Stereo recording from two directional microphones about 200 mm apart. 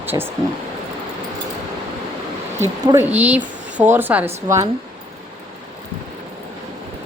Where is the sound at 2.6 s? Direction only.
10° right (ahead or behind).